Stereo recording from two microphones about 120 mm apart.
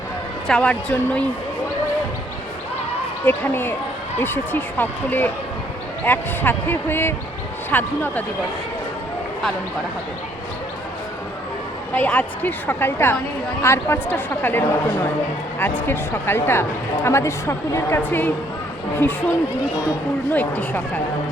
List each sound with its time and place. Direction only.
0.4 s a woman's voice: 5° left (ahead or behind)
3.2 s a woman's voice: 15° left (ahead or behind)
11.9 s a woman's voice: 15° left (ahead or behind)